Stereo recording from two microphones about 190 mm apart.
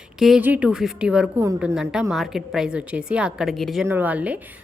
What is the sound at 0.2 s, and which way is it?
Speech, 5° right (ahead or behind).